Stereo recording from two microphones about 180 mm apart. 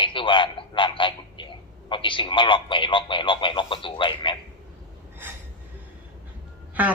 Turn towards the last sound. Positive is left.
turn(degrees=-10)  # may be behind; listen again after turning